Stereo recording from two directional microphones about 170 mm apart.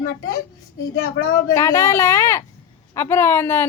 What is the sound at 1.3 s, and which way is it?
Speech, 15° left (ahead or behind).